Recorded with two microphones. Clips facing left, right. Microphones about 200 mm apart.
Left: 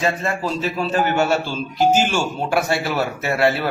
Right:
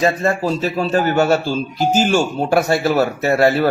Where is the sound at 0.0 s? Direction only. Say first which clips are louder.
Right 5 dB; 40° right (ahead or behind).